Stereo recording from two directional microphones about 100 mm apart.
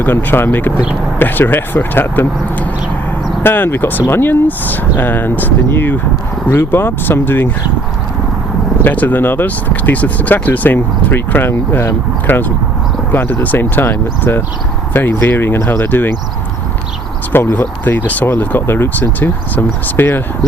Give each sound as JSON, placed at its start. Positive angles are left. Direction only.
{"t": 0.0, "sound": "speech", "side_deg": 20}
{"t": 8.8, "sound": "speech", "side_deg": 15}
{"t": 17.3, "sound": "speech", "side_deg": 25}